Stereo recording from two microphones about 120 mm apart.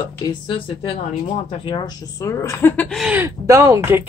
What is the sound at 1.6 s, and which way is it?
Speech, 45° left (ahead or behind).